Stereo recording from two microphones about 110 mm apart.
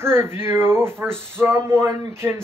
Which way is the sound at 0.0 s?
20° right (ahead or behind).